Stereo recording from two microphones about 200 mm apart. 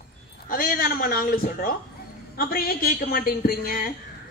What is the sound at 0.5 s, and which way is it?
A woman's voice, 45° left (ahead or behind).